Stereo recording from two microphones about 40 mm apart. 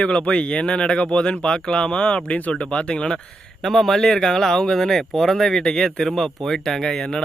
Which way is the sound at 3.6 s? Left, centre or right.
Centre.